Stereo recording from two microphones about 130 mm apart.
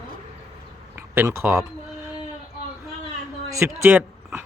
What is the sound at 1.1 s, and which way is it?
Speech, 20° right (ahead or behind).